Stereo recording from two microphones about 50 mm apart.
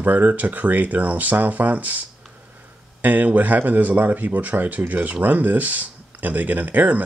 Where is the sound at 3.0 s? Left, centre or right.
Right.